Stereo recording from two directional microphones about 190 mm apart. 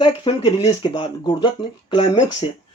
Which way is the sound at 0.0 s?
30° left (ahead or behind).